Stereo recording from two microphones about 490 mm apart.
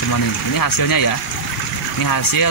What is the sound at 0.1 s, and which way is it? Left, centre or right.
Speech, left.